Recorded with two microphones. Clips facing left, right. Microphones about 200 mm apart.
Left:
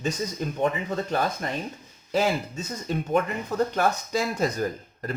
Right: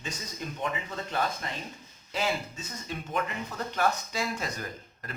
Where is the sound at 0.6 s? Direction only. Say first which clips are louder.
Left 9 dB; 45° left (ahead or behind).